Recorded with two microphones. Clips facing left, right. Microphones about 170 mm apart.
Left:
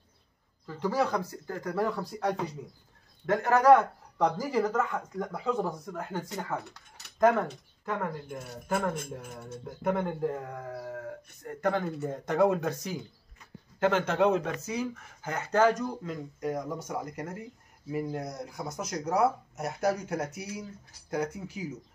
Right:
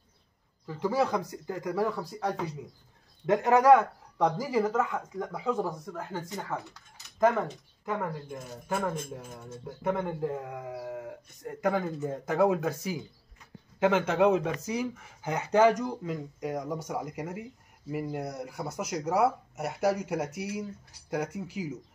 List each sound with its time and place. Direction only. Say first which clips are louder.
0.7 s speech: right 1 dB; 10° right (ahead or behind)
3.3 s a man's voice: right 1 dB; 15° right (ahead or behind)
8.3 s a man's voice: left 1 dB; 5° left (ahead or behind)